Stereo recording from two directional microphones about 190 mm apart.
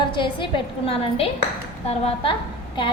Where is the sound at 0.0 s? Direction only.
25° left (ahead or behind).